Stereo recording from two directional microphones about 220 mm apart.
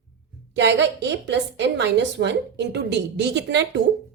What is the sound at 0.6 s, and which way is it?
A woman's voice, 55° right (ahead or behind).